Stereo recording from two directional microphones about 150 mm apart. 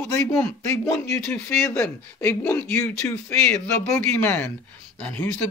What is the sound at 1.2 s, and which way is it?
Speech, 5° left (ahead or behind).